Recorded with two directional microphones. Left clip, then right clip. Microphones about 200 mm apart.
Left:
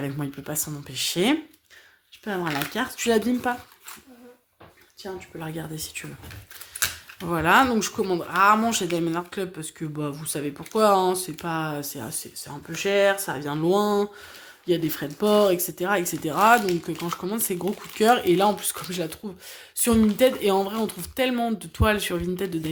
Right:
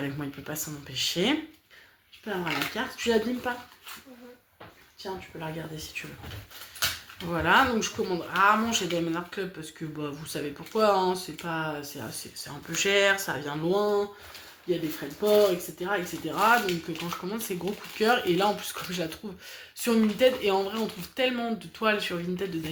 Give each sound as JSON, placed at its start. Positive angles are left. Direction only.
{"t": 0.0, "sound": "speech", "side_deg": 40}
{"t": 2.3, "sound": "speech", "side_deg": 60}
{"t": 5.0, "sound": "speech", "side_deg": 60}
{"t": 7.2, "sound": "speech", "side_deg": 50}
{"t": 12.7, "sound": "speech", "side_deg": 35}
{"t": 15.2, "sound": "speech", "side_deg": 70}